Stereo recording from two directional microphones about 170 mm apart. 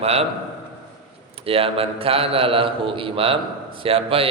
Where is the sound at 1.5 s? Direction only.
35° right (ahead or behind).